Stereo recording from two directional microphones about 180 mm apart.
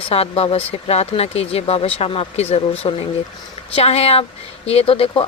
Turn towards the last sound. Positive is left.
turn(degrees=30)  # may be behind; listen again after turning